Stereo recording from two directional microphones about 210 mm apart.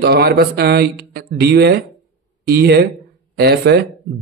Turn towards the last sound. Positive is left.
turn(degrees=-50)  # may be behind; listen again after turning